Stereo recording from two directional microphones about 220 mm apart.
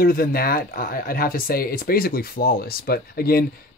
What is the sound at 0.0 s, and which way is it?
Speech, 40° left (ahead or behind).